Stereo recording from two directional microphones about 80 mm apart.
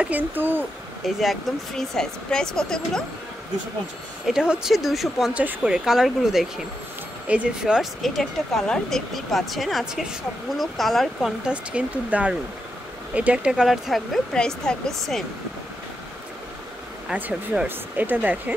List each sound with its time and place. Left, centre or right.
0.0 s speech: right
1.0 s speech: centre
4.3 s speech: centre
5.3 s speech: centre
5.7 s speech: centre
8.0 s speech: centre
11.4 s speech: centre
17.1 s speech: centre